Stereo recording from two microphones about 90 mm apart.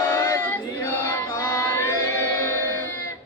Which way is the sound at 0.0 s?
30° left (ahead or behind).